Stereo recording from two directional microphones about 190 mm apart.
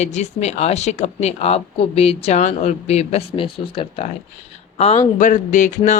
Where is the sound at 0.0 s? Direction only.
35° left (ahead or behind).